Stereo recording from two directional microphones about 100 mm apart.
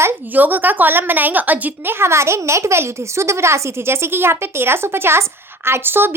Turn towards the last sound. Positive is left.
turn(degrees=-20)  # may be behind; listen again after turning